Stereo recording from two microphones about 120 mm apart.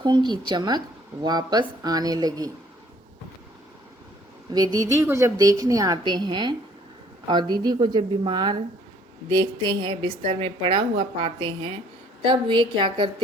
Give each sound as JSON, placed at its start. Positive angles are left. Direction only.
{"t": 0.0, "sound": "speech", "side_deg": -40}
{"t": 4.5, "sound": "a woman's voice", "side_deg": -30}